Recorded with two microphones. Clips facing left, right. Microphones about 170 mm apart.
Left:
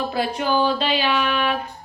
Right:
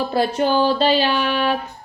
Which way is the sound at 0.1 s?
35° right (ahead or behind).